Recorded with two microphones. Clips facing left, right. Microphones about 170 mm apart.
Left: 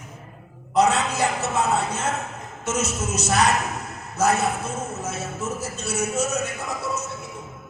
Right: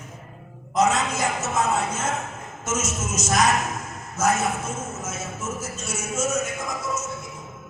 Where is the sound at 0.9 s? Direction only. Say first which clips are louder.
Left 2 dB; 35° left (ahead or behind).